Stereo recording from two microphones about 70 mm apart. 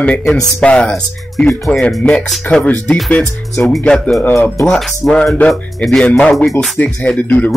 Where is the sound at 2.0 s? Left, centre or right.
Centre.